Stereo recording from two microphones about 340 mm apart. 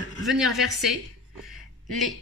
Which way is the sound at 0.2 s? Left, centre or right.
Centre.